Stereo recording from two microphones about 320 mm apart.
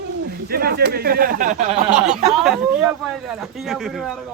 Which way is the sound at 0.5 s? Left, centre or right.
Right.